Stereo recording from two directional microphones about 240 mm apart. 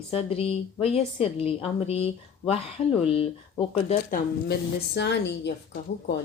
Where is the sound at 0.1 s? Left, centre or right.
Left.